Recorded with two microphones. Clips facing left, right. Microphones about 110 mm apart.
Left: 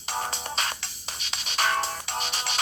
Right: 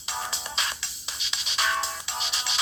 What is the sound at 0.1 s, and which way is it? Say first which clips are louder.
Music: left 3 dB; 50° left (ahead or behind).